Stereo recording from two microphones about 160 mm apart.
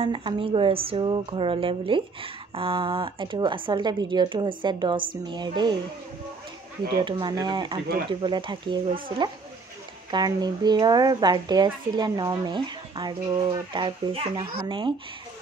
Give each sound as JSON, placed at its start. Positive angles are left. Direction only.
{"t": 0.0, "sound": "speech", "side_deg": -30}
{"t": 7.1, "sound": "a woman's voice", "side_deg": -30}
{"t": 10.1, "sound": "a woman's voice", "side_deg": -25}